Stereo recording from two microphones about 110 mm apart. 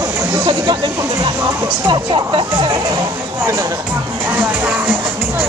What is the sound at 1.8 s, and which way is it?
Speech, 50° right (ahead or behind).